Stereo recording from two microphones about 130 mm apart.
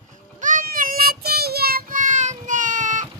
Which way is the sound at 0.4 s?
85° right.